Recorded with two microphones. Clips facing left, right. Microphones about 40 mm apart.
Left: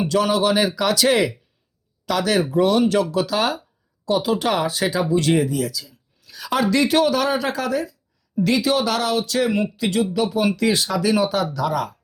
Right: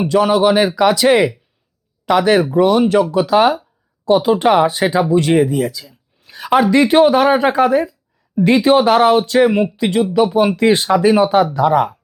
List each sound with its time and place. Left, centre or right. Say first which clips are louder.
0.0 s speech: right 6 dB; centre
2.5 s speech: right 5 dB; centre; by 6.6 s right
6.6 s speech: right 7 dB; right